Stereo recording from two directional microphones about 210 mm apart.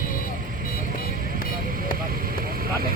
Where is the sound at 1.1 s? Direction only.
40° right (ahead or behind).